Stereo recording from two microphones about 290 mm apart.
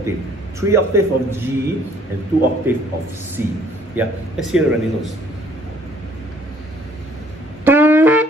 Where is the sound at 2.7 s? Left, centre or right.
Centre.